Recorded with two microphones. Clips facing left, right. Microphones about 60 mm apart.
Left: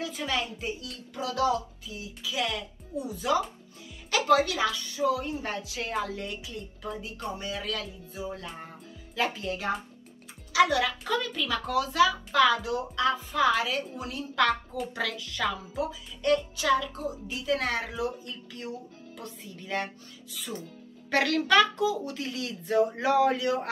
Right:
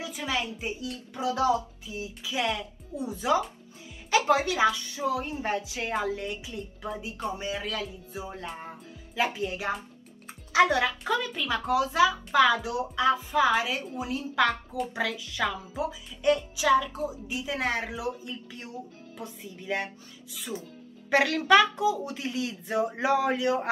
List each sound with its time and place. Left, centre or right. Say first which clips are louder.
0.0 s a woman's voice: even; centre
10.5 s a child's voice: right 1 dB; right
11.1 s a woman's voice: right 1 dB; centre